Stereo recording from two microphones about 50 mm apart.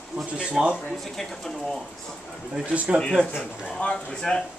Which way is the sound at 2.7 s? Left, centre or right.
Right.